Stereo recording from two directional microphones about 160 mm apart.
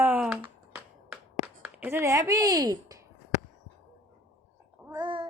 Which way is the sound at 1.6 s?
10° right (ahead or behind).